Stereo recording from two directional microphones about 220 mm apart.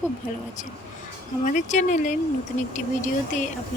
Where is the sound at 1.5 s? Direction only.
35° left (ahead or behind).